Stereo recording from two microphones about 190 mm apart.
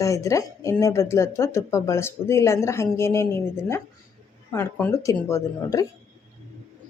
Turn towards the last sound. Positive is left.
turn(degrees=15)  # may be behind; listen again after turning